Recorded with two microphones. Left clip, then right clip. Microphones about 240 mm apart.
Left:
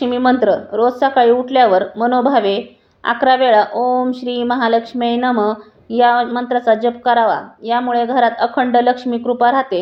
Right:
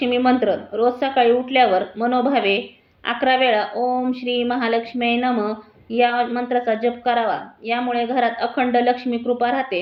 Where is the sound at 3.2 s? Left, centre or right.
Left.